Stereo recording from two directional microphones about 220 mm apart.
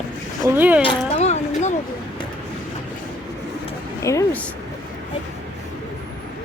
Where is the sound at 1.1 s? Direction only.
30° left (ahead or behind).